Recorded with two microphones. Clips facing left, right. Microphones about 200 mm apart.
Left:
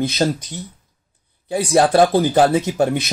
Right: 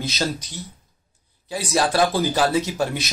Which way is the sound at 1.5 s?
55° left (ahead or behind).